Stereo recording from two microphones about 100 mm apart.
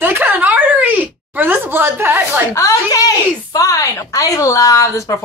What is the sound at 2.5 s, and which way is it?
Speech, 35° left (ahead or behind).